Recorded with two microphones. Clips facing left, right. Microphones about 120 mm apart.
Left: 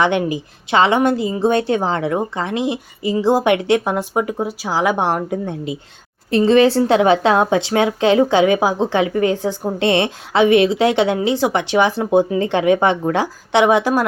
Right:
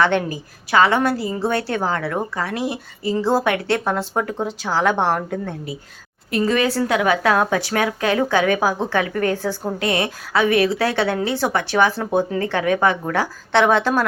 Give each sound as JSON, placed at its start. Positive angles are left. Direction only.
{"t": 0.0, "sound": "a woman's voice", "side_deg": 15}
{"t": 6.3, "sound": "a woman's voice", "side_deg": 25}